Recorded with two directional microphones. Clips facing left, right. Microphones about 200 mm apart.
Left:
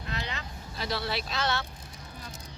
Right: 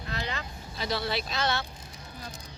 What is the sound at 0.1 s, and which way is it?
Vehicle, 35° right (ahead or behind).